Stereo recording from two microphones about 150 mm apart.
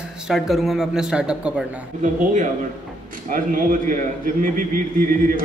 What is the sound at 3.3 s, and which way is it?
A man's voice, 70° right (ahead or behind).